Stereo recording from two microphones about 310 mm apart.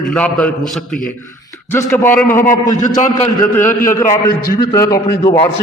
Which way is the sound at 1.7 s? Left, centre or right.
Centre.